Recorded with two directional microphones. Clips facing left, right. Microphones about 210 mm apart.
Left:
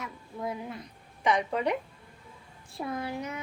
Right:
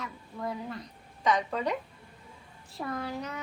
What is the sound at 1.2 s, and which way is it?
Speech, 10° left (ahead or behind).